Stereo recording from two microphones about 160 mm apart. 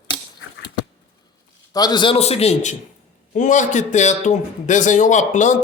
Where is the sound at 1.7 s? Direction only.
25° left (ahead or behind).